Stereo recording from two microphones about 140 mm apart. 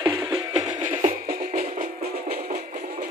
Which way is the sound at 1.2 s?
90° right.